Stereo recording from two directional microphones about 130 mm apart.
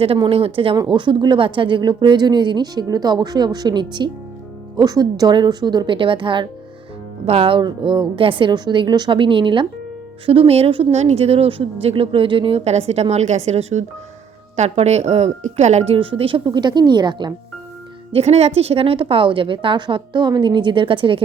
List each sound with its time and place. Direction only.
0.2 s speech: 45° right (ahead or behind)
18.1 s speech: 55° right (ahead or behind)